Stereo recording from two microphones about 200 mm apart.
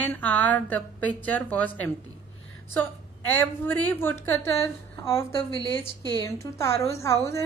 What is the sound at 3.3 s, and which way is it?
A woman's voice, 10° left (ahead or behind).